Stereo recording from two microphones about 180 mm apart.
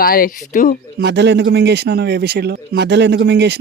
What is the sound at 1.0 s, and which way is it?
A man's voice, 70° right (ahead or behind).